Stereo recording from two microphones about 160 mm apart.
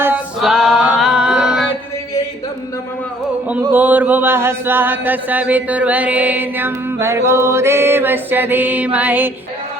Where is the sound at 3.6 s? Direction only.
10° right (ahead or behind).